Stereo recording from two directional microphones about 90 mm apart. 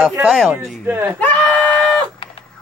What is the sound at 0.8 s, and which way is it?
Speech, 25° right (ahead or behind).